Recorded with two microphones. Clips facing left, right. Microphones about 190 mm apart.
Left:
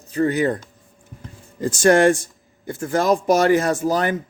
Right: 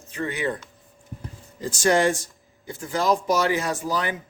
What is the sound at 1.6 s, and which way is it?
Speech, 55° left (ahead or behind).